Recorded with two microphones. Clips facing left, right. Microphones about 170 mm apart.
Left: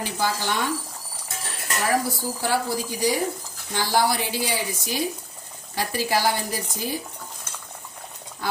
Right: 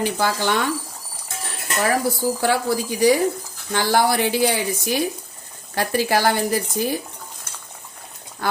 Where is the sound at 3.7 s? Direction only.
65° right (ahead or behind).